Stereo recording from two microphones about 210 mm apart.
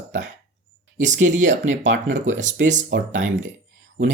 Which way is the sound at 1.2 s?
35° right (ahead or behind).